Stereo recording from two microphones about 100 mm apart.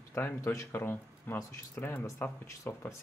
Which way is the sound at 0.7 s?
20° left (ahead or behind).